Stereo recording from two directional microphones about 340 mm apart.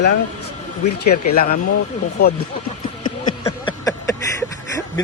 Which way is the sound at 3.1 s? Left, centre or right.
Centre.